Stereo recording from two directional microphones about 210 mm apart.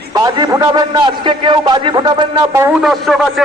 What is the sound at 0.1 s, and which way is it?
A man's voice, 20° right (ahead or behind).